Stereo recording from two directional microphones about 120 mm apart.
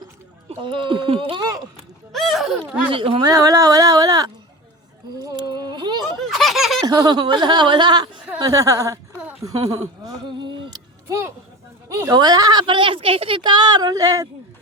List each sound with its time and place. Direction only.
0.6 s speech: 45° right (ahead or behind)
2.1 s a sound: centre (ahead or behind)
2.9 s speech: 45° right (ahead or behind)
3.2 s a woman's voice: 30° right (ahead or behind)
5.1 s a sound: 30° right (ahead or behind)
6.1 s baby laughter: centre (ahead or behind)
6.8 s a woman's voice: 30° right (ahead or behind)
8.4 s a woman's voice: 30° right (ahead or behind)
11.9 s a woman's voice: 25° right (ahead or behind)